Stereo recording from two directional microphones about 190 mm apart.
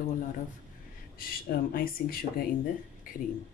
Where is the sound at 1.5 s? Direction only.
50° left (ahead or behind).